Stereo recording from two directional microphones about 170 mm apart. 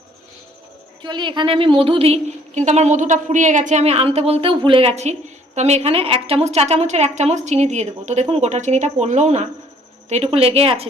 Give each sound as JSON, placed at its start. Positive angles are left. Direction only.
{"t": 1.0, "sound": "a woman's voice", "side_deg": -25}